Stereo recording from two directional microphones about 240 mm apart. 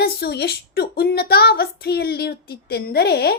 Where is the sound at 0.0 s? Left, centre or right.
Left.